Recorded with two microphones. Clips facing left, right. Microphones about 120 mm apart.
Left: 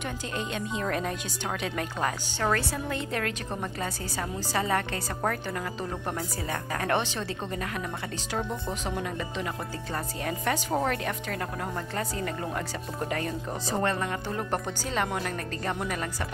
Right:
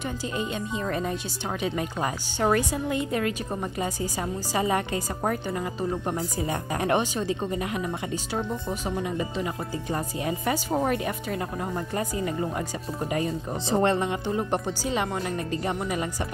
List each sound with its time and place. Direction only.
0.4 s a woman's voice: 5° right (ahead or behind)
13.7 s speech: 25° right (ahead or behind)
14.3 s a woman's voice: 10° right (ahead or behind)